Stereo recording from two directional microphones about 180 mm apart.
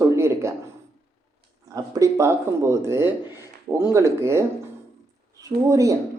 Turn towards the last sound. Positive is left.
turn(degrees=-15)  # may be behind; listen again after turning